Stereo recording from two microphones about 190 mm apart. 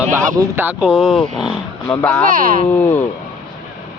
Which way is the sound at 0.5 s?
10° right (ahead or behind).